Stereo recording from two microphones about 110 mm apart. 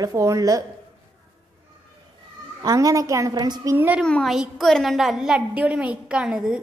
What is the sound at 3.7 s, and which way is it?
Speech, 15° right (ahead or behind).